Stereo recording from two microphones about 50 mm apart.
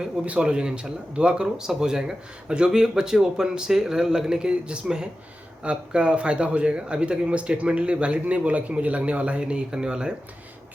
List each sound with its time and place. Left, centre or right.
0.3 s speech: centre